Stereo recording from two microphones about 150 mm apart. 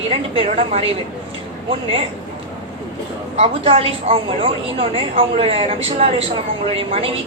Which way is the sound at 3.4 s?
40° right (ahead or behind).